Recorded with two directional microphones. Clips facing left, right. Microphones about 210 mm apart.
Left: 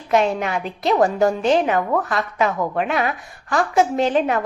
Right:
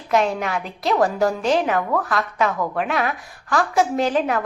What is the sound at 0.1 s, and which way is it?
A woman's voice, centre (ahead or behind).